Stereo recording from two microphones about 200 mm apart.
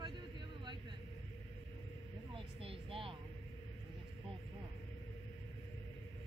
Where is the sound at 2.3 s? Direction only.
25° right (ahead or behind).